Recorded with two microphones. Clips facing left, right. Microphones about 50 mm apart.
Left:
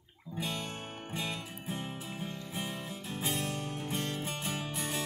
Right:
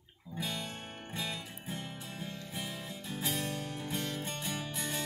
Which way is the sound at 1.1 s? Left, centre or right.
Centre.